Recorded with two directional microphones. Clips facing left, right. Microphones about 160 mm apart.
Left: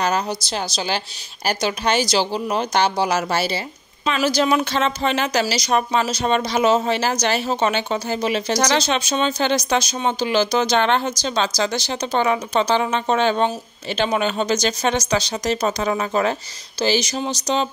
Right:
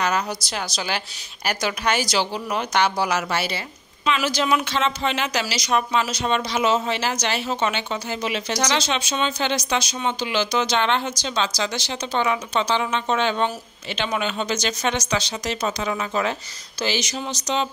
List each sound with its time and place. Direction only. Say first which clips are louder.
0.0 s a woman's voice: left 2 dB; 30° left (ahead or behind)